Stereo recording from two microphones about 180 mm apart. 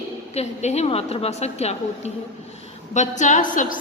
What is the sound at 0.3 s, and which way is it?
A woman's voice, 35° left (ahead or behind).